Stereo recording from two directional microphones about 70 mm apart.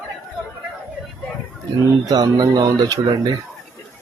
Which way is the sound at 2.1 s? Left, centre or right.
Right.